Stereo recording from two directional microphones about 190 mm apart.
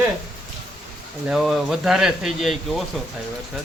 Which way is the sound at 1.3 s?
Centre (ahead or behind).